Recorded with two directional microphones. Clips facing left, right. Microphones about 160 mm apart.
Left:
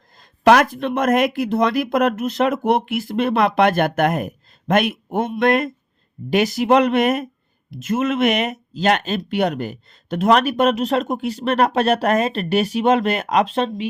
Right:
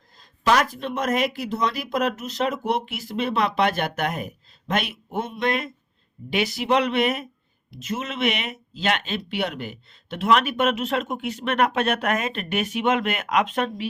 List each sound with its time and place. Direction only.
0.2 s speech: 60° left (ahead or behind); by 13.8 s 25° left (ahead or behind)